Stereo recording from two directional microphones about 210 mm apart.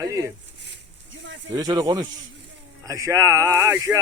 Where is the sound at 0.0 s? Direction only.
15° right (ahead or behind).